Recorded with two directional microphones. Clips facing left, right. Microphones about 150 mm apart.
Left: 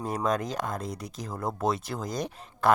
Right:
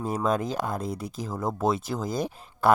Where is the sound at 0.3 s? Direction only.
5° right (ahead or behind).